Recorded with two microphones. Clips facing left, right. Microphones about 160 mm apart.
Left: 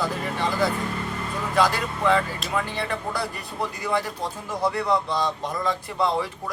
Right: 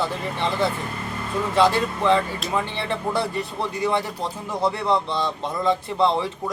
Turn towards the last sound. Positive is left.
turn(degrees=-25)  # may be behind; listen again after turning